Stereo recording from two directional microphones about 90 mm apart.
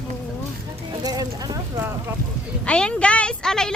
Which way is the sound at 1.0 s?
45° right (ahead or behind).